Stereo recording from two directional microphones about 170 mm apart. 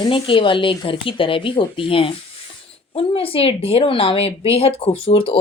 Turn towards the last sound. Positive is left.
turn(degrees=30)  # may be behind; listen again after turning